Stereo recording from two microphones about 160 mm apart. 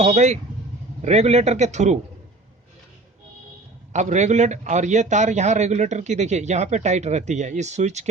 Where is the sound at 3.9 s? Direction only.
45° right (ahead or behind).